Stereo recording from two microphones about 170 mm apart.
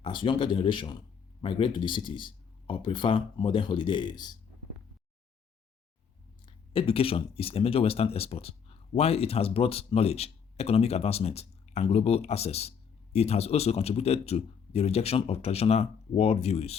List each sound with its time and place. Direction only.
0.0 s speech: 30° left (ahead or behind)
6.4 s speech: 30° left (ahead or behind)